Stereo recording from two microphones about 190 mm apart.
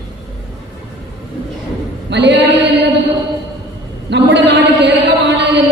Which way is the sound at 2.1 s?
70° right (ahead or behind).